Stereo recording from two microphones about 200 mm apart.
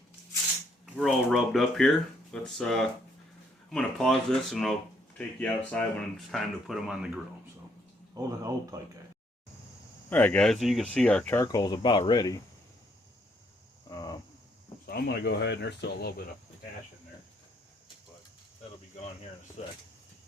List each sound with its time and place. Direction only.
0.9 s speech: centre (ahead or behind)
5.7 s speech: 5° left (ahead or behind)
8.1 s speech: 15° right (ahead or behind)
10.1 s speech: 10° left (ahead or behind)
13.9 s a sound: 20° left (ahead or behind)
14.8 s speech: 50° left (ahead or behind)
19.6 s speech: 30° left (ahead or behind)